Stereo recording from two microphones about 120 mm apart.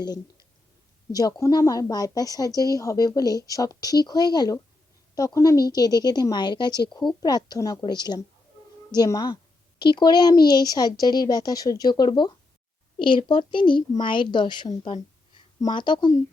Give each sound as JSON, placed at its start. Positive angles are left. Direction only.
{"t": 1.1, "sound": "a woman's voice", "side_deg": 30}